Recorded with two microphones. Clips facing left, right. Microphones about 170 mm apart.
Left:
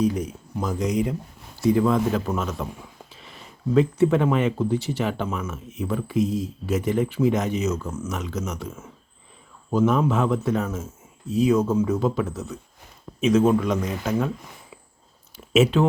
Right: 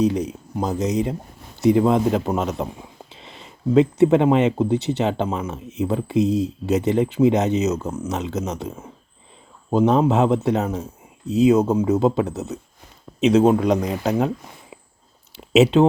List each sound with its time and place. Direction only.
0.0 s speech: 25° right (ahead or behind)
7.9 s speech: 30° right (ahead or behind)
11.6 s a man's voice: 35° right (ahead or behind)
11.9 s a man's voice: 25° right (ahead or behind)
15.5 s speech: 25° right (ahead or behind)